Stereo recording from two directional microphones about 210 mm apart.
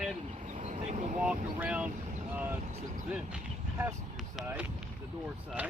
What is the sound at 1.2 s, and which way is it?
Speech, 5° right (ahead or behind).